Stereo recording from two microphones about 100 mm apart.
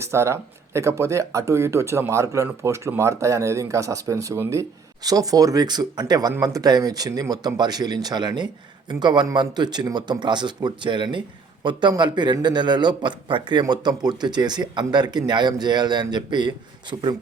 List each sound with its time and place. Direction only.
0.0 s a man's voice: 30° right (ahead or behind); by 16.6 s 50° right (ahead or behind)